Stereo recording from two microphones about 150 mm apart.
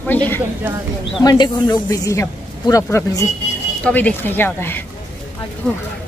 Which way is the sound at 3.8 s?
10° left (ahead or behind).